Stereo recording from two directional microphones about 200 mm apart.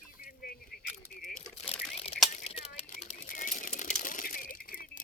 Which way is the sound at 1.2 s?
45° left (ahead or behind).